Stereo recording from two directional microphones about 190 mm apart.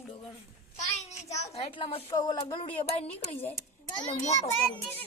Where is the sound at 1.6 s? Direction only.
30° left (ahead or behind).